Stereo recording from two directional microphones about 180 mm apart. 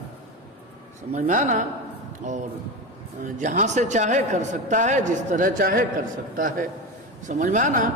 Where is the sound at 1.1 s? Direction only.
45° right (ahead or behind).